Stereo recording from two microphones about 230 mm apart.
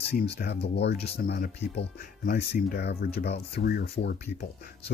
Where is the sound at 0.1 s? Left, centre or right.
Left.